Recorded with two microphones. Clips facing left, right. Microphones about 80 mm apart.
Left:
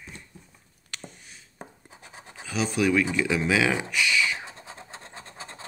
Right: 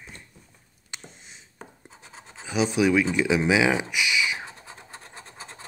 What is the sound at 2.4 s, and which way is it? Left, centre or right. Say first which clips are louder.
Speech: right 3 dB; centre.